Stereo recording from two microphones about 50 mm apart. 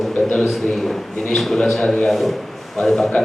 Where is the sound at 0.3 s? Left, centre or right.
Centre.